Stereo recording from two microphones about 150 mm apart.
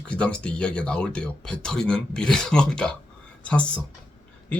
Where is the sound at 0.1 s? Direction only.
5° left (ahead or behind).